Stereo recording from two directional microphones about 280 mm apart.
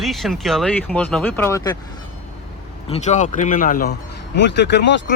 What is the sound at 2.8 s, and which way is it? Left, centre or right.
Speech, left.